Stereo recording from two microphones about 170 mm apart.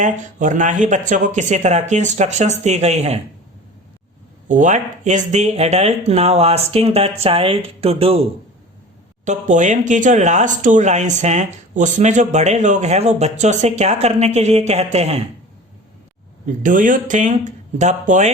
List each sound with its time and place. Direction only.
0.0 s speech: 45° right (ahead or behind)
4.4 s speech: 50° right (ahead or behind)
16.6 s speech: 50° right (ahead or behind)